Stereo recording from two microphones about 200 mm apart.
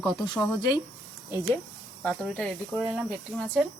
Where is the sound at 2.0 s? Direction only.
5° left (ahead or behind).